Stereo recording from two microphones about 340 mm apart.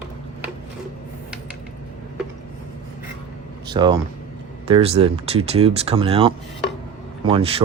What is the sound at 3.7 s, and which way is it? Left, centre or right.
Speech, centre.